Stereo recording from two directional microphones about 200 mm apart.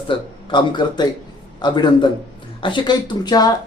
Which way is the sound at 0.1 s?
25° left (ahead or behind).